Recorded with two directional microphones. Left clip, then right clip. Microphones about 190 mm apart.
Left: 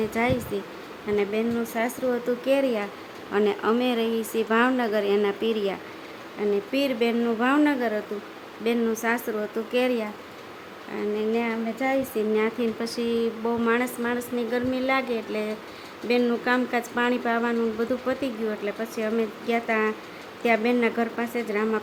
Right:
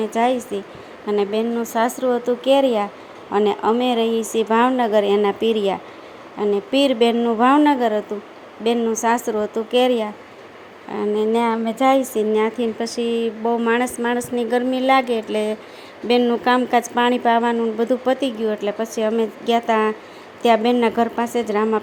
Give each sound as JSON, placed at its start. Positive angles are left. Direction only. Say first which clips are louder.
{"t": 0.1, "sound": "speech", "louder": "right 6 dB", "side_deg": -15}
{"t": 10.9, "sound": "speech", "louder": "right 7 dB", "side_deg": -30}